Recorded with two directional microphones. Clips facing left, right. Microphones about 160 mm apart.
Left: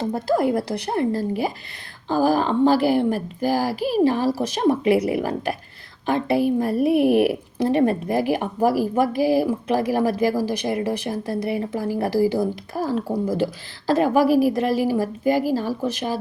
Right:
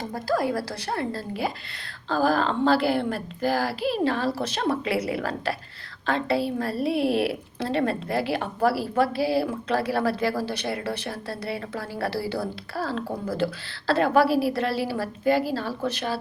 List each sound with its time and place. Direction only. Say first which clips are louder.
0.0 s a woman's voice: left 5 dB; 25° left (ahead or behind)